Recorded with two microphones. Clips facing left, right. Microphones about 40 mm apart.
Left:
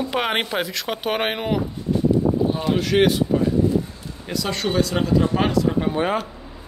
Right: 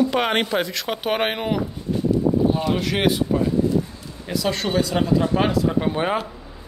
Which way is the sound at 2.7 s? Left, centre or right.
Centre.